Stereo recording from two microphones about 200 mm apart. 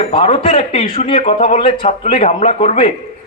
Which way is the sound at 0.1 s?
30° left (ahead or behind).